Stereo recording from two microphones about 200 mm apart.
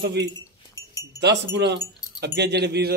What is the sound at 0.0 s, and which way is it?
Speech, 55° right (ahead or behind).